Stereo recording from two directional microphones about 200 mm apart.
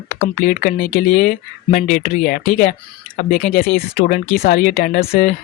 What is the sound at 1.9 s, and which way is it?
Speech, 45° left (ahead or behind).